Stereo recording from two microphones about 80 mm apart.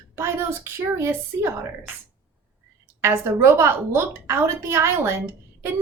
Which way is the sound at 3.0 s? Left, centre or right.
Right.